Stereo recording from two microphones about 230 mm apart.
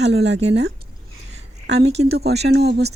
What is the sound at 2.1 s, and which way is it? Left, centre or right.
Speech, right.